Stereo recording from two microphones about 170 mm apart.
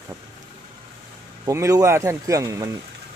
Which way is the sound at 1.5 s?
20° right (ahead or behind).